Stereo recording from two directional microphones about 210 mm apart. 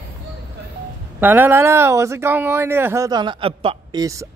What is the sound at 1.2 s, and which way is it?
Speech, 10° right (ahead or behind).